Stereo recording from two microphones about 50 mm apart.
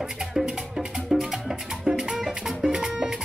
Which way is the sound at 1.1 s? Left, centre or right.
Centre.